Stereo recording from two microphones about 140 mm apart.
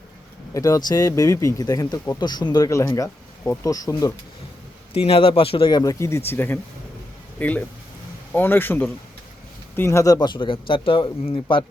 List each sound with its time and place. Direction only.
0.5 s speech: 25° left (ahead or behind)
4.9 s a man's voice: 40° left (ahead or behind)